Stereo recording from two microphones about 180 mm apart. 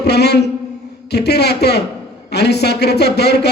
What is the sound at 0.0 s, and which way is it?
A man's voice, 65° left (ahead or behind).